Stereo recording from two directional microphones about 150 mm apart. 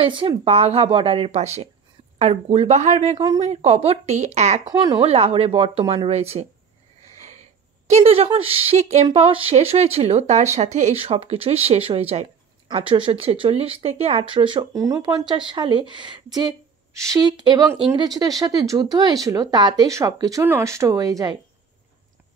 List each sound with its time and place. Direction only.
0.0 s speech: 35° right (ahead or behind)
7.9 s speech: 40° right (ahead or behind); by 21.4 s 25° right (ahead or behind)